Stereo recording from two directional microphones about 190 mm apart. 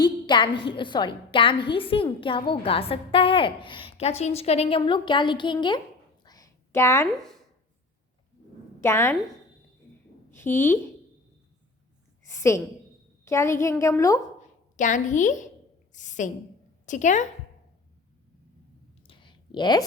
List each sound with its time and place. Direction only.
0.0 s a woman's voice: 25° left (ahead or behind)
6.2 s a sound: 20° left (ahead or behind)
7.2 s speech: centre (ahead or behind)
8.8 s a woman's voice: 15° left (ahead or behind)
10.3 s a woman's voice: 10° left (ahead or behind)
12.3 s a woman's voice: 15° left (ahead or behind)
14.8 s a woman's voice: 40° left (ahead or behind)
19.0 s clicking: 25° left (ahead or behind)